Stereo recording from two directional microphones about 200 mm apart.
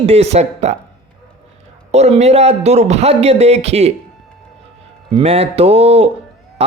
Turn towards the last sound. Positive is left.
turn(degrees=-30)  # may be behind; listen again after turning